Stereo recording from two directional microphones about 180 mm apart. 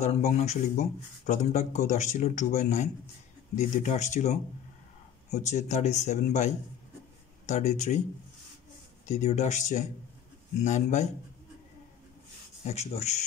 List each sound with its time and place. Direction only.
0.0 s speech: 40° left (ahead or behind)
9.0 s speech: 40° left (ahead or behind)
12.6 s speech: 35° left (ahead or behind)